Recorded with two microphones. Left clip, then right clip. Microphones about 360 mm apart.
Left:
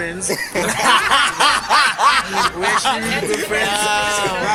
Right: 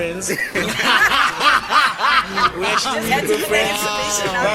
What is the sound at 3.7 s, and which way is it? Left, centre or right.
Speech, centre.